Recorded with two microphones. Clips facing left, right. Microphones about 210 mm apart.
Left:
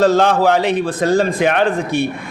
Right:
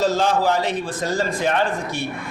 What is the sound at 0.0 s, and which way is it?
A man's voice, 60° left (ahead or behind).